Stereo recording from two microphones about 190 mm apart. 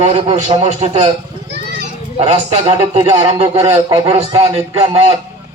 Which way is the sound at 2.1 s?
35° right (ahead or behind).